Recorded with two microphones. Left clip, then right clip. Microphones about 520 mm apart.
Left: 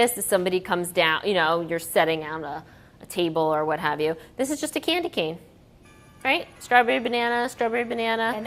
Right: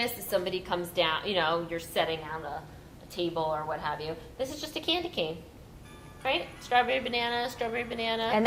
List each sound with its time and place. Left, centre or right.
0.3 s a woman's voice: left
3.2 s a woman's voice: left